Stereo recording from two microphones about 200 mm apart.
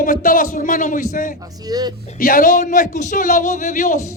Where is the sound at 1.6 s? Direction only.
20° right (ahead or behind).